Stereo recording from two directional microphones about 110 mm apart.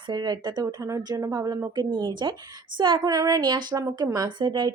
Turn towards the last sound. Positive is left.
turn(degrees=-45)  # may be behind; listen again after turning